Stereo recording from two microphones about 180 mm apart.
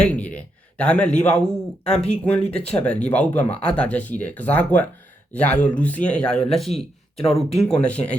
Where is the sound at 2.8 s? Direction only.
5° left (ahead or behind).